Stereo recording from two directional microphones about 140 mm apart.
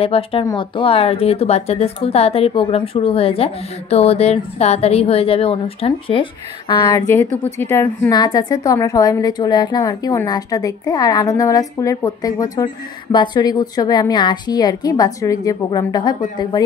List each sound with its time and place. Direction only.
0.0 s a woman's voice: 40° left (ahead or behind)
6.7 s a woman's voice: 25° left (ahead or behind)
8.1 s a woman's voice: 30° left (ahead or behind)